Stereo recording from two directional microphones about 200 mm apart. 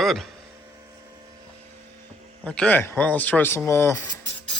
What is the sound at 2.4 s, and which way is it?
Speech, 5° left (ahead or behind).